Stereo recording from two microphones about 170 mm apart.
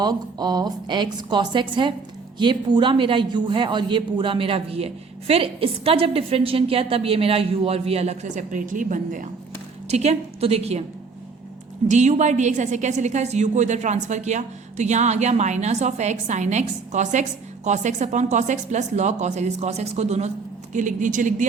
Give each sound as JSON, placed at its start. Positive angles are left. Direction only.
{"t": 0.0, "sound": "a man's voice", "side_deg": -25}
{"t": 9.9, "sound": "a woman's voice", "side_deg": -40}
{"t": 11.9, "sound": "a woman's voice", "side_deg": -45}